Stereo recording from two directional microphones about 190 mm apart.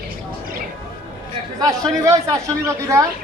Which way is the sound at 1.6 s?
20° right (ahead or behind).